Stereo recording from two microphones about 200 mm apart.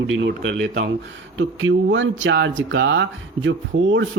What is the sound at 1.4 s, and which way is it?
Speech, 75° right (ahead or behind).